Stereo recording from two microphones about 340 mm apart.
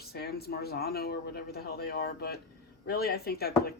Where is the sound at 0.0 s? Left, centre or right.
Left.